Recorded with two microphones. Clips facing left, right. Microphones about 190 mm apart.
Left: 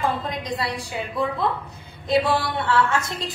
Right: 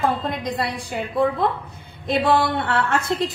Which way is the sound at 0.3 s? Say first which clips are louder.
Right 2 dB; 55° right (ahead or behind).